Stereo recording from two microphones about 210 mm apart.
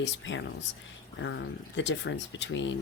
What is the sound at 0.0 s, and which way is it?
Speech, 60° left (ahead or behind).